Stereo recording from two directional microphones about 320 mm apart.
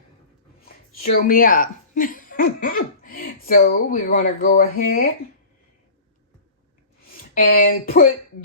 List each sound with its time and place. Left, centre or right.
0.9 s speech: left
7.5 s speech: left